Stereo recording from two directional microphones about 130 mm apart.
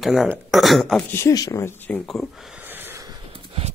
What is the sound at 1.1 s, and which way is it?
Speech, 25° left (ahead or behind).